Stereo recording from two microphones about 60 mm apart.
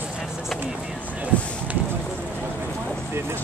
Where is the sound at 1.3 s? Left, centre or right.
Left.